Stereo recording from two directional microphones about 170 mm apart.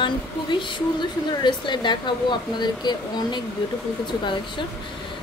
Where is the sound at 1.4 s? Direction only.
25° left (ahead or behind).